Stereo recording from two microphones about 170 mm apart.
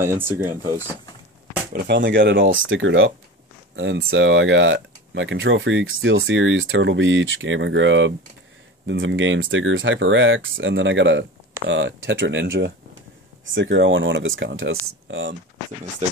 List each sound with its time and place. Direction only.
0.0 s speech: 15° right (ahead or behind)
1.7 s speech: 85° right